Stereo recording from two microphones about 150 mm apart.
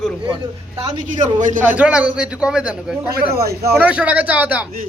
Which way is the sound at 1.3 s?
60° right (ahead or behind).